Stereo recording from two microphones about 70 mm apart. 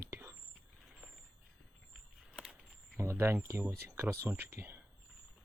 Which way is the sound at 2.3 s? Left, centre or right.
Centre.